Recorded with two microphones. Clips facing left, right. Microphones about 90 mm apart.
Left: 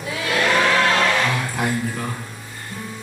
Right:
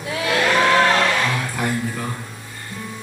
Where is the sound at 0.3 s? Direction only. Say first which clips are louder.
Even; centre (ahead or behind).